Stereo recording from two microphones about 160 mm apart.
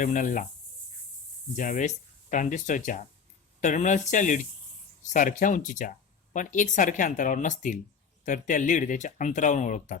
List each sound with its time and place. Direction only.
0.0 s speech: 50° left (ahead or behind)
1.5 s speech: 50° left (ahead or behind)